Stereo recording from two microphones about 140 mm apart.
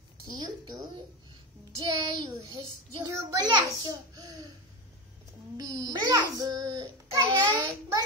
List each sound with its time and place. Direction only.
0.3 s a child's voice: 30° right (ahead or behind)
5.6 s a child's voice: 25° right (ahead or behind)